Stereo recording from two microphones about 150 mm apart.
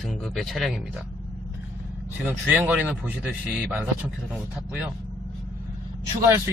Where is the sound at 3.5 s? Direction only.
Centre (ahead or behind).